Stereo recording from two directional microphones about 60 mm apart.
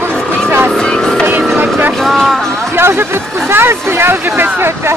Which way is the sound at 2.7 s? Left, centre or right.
Right.